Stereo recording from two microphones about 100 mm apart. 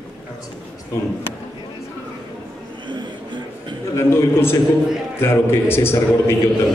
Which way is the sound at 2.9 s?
50° right (ahead or behind).